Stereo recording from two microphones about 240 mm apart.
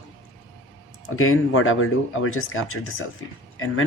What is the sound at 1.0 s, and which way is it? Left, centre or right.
Speech, left.